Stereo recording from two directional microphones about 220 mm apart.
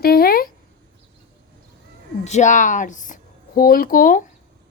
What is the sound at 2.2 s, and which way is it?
A woman's voice, 30° left (ahead or behind).